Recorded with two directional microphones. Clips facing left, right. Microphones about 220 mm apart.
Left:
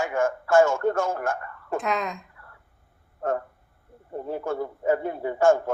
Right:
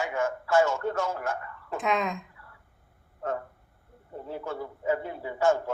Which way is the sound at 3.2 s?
50° left (ahead or behind).